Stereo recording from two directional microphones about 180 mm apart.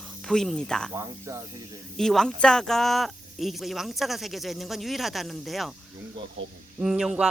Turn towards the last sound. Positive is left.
turn(degrees=-5)  # may be behind; listen again after turning